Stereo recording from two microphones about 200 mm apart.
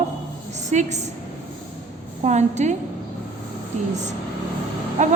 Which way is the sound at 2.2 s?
35° right (ahead or behind).